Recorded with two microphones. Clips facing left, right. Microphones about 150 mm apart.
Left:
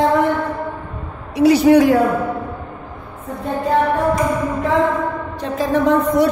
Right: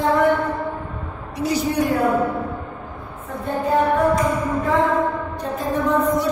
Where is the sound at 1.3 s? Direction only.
75° left (ahead or behind).